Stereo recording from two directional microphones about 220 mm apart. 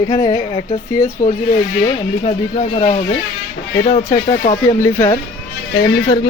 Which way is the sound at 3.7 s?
35° left (ahead or behind).